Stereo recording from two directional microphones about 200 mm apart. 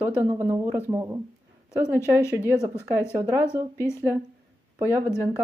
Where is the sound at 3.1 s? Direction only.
10° right (ahead or behind).